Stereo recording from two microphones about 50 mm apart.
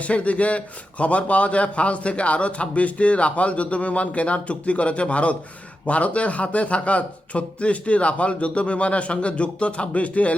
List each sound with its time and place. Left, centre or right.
0.0 s a man's voice: left